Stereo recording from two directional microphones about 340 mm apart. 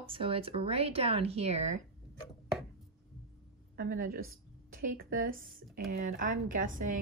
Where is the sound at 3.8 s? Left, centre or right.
Right.